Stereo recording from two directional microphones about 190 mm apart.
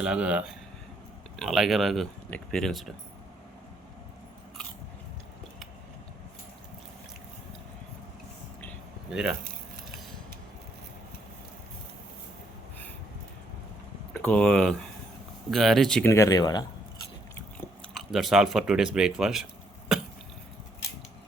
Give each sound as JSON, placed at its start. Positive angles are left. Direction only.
{"t": 0.0, "sound": "speech", "side_deg": -5}
{"t": 9.0, "sound": "speech", "side_deg": -5}
{"t": 14.1, "sound": "speech", "side_deg": 5}
{"t": 16.1, "sound": "speech", "side_deg": 20}
{"t": 17.8, "sound": "speech", "side_deg": 0}
{"t": 19.9, "sound": "cough", "side_deg": 0}